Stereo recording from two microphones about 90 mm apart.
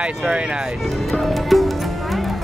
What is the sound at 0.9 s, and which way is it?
Music, centre (ahead or behind).